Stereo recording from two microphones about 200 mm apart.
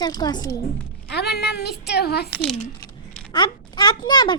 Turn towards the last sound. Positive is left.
turn(degrees=20)  # may be behind; listen again after turning